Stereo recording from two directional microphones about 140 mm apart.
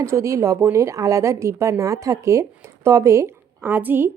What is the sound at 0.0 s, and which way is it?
A woman's voice, 20° right (ahead or behind).